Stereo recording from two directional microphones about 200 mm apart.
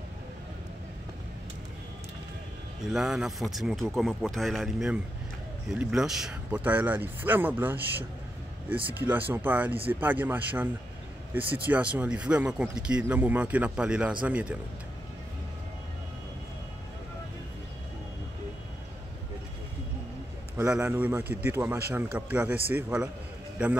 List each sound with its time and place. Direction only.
2.9 s speech: centre (ahead or behind)
20.5 s speech: 10° right (ahead or behind)